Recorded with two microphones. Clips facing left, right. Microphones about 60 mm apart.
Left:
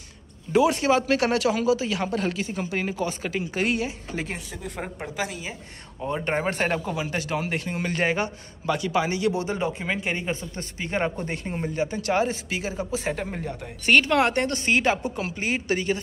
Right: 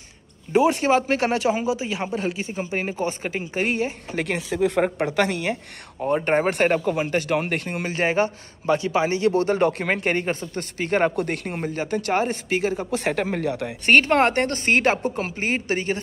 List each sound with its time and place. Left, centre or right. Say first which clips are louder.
0.5 s speech: right 2 dB; right
4.2 s speech: right 13 dB; right
4.8 s a woman's voice: right 9 dB; right
6.1 s speech: right 5 dB; right
6.5 s speech: right 5 dB; right
7.8 s speech: right 3 dB; right
9.4 s speech: right 7 dB; right
13.0 s speech: right 6 dB; right
13.8 s speech: right 2 dB; right